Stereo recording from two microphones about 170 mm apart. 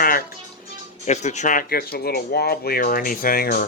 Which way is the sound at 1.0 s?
45° left (ahead or behind).